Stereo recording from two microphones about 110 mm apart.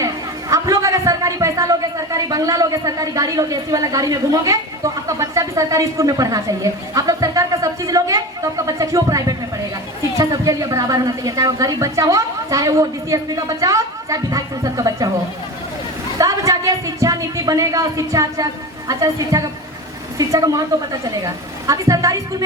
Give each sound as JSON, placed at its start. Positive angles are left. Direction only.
{"t": 0.5, "sound": "a man's voice", "side_deg": -30}
{"t": 16.1, "sound": "a woman's voice", "side_deg": -30}
{"t": 21.7, "sound": "a woman's voice", "side_deg": -30}